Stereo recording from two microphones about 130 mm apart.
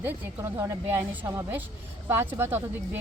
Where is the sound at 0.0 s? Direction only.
15° right (ahead or behind).